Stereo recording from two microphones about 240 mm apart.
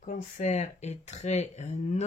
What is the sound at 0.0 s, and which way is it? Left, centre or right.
Speech, left.